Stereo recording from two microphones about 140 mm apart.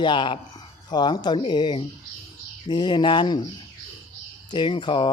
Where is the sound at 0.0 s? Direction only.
35° left (ahead or behind).